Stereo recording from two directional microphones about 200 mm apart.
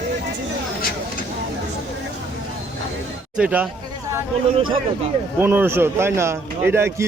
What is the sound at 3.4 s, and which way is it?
Speech, 5° right (ahead or behind).